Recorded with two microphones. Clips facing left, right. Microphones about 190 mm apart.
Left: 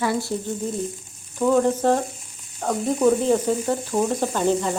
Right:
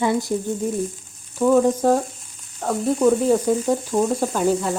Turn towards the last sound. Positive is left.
turn(degrees=-5)  # may be behind; listen again after turning